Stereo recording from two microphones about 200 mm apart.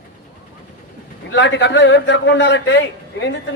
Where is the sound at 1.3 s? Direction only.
60° left (ahead or behind).